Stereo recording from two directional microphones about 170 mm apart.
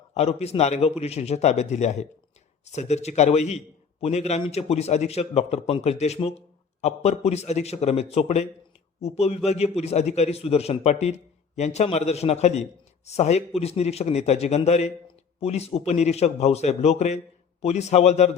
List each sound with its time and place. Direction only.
0.1 s a man's voice: 40° left (ahead or behind)